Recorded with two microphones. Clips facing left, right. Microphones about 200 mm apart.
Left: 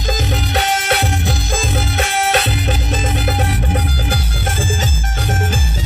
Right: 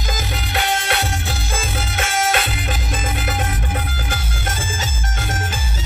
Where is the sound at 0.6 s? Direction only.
40° left (ahead or behind).